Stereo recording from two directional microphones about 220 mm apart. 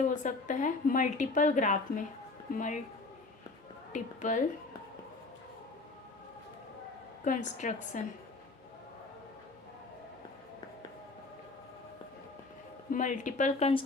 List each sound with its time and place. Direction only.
0.1 s a woman's voice: 35° left (ahead or behind)
3.9 s a woman's voice: 35° left (ahead or behind)
7.3 s a woman's voice: 35° left (ahead or behind)
12.9 s a woman's voice: 35° left (ahead or behind)